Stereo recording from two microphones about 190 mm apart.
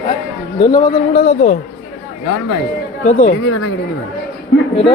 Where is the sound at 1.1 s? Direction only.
30° left (ahead or behind).